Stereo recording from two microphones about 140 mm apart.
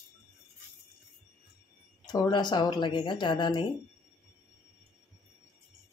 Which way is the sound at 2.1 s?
30° left (ahead or behind).